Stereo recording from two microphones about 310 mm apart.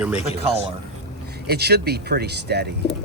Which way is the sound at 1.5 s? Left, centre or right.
Right.